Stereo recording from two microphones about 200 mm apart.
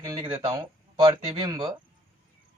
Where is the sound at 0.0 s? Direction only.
20° right (ahead or behind).